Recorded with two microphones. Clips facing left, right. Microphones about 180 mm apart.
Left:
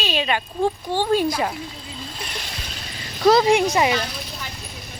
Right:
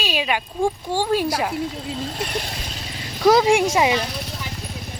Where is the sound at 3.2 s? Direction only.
10° right (ahead or behind).